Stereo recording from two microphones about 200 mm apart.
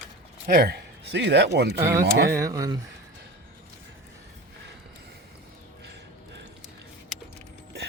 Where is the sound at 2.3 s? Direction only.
15° right (ahead or behind).